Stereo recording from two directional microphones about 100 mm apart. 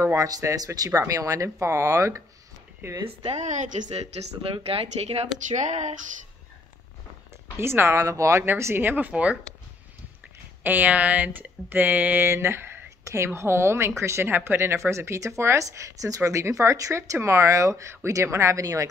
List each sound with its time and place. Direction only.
0.0 s speech: 30° right (ahead or behind)
3.9 s speech: 90° right
7.5 s speech: 25° right (ahead or behind)
10.6 s speech: 15° right (ahead or behind); by 18.9 s 35° right (ahead or behind)